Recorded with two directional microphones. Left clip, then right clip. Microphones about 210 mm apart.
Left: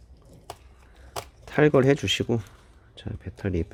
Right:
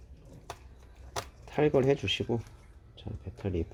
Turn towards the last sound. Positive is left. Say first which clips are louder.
# left 5 dB
turn(degrees=30)  # may be behind; listen again after turning